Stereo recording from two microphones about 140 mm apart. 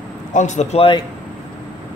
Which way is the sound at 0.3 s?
60° left (ahead or behind).